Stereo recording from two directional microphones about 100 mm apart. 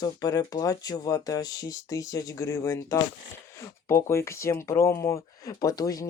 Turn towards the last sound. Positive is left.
turn(degrees=35)  # may be behind; listen again after turning